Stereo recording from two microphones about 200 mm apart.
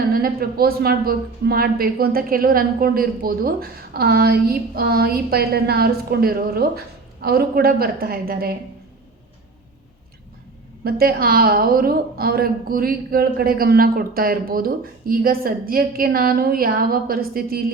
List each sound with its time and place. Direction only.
0.1 s a woman's voice: 45° right (ahead or behind)
10.8 s a woman's voice: 50° right (ahead or behind)